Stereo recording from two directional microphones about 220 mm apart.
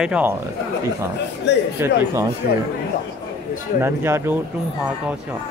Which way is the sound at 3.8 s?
10° right (ahead or behind).